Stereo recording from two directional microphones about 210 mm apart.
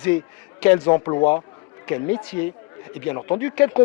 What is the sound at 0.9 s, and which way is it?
Speech, 25° left (ahead or behind).